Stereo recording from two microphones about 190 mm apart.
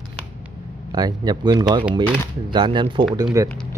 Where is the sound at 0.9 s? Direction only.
20° right (ahead or behind).